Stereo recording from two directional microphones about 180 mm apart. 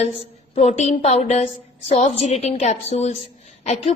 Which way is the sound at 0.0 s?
35° left (ahead or behind).